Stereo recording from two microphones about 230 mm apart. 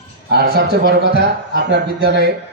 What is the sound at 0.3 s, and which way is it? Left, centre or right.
A man's voice, right.